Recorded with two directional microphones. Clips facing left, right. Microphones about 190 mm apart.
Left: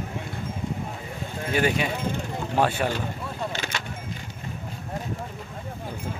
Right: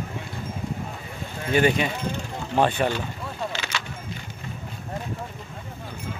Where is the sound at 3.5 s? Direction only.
50° left (ahead or behind).